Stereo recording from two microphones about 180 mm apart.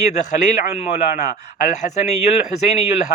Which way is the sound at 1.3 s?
50° left (ahead or behind).